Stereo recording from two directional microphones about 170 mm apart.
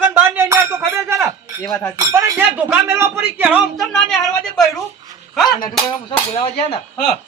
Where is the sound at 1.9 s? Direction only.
20° right (ahead or behind); by 4.1 s centre (ahead or behind).